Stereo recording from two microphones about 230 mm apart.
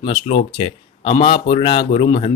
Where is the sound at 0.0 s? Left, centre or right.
Left.